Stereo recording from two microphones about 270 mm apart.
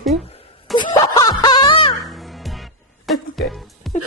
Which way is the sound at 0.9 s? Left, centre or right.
Centre.